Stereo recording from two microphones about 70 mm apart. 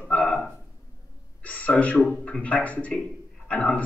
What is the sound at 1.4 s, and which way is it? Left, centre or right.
A man's voice, left.